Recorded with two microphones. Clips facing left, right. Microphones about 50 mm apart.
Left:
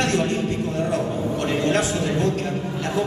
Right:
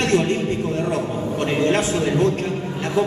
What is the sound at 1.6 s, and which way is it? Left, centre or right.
Speech, right.